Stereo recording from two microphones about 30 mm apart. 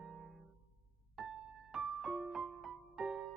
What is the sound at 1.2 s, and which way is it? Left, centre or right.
Music, centre.